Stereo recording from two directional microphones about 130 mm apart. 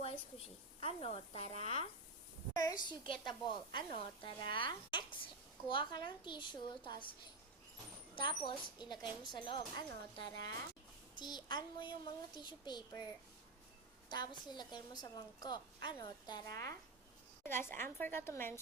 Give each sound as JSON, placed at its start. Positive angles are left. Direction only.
{"t": 0.0, "sound": "a woman's voice", "side_deg": 50}
{"t": 2.5, "sound": "a woman's voice", "side_deg": 30}
{"t": 3.1, "sound": "a woman's voice", "side_deg": 40}
{"t": 14.1, "sound": "a woman's voice", "side_deg": 35}